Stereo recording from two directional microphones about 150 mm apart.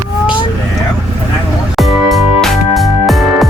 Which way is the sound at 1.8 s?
Centre (ahead or behind).